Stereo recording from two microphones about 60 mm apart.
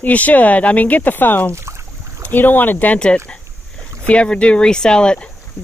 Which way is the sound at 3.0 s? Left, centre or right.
Centre.